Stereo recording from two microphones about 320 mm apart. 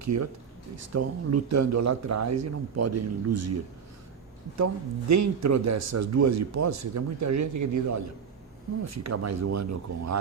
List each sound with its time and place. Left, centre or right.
0.0 s a man's voice: right